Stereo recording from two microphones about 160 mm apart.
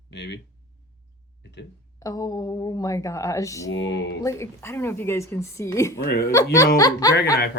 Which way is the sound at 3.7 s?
90° left.